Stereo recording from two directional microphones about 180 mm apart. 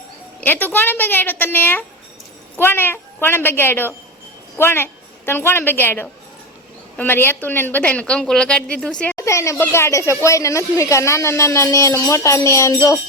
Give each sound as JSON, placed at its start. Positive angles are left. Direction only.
{"t": 0.4, "sound": "a woman's voice", "side_deg": 10}
{"t": 9.1, "sound": "a woman's voice", "side_deg": 15}